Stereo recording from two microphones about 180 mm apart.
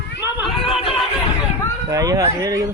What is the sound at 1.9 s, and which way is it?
Speech, 20° right (ahead or behind).